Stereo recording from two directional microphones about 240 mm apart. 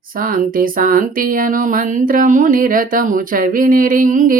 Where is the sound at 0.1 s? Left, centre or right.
Right.